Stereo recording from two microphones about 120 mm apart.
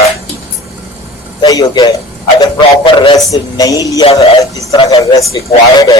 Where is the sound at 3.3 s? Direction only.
30° left (ahead or behind).